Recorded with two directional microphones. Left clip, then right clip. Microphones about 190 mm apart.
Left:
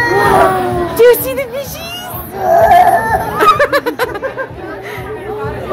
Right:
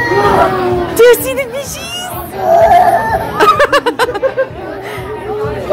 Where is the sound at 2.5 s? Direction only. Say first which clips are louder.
Even; centre (ahead or behind).